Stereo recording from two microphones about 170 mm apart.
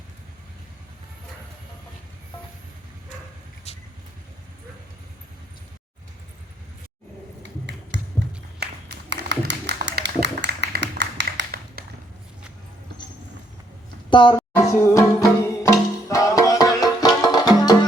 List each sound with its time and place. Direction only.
3.7 s vehicle: 40° left (ahead or behind)
7.7 s music: 90° right
8.5 s a sound: 80° right; by 11.9 s 65° right (ahead or behind)
14.1 s speech: 30° left (ahead or behind)
14.5 s music: 15° left (ahead or behind)